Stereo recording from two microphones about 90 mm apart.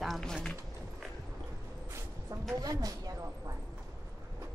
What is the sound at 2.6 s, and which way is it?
Speech, 45° right (ahead or behind).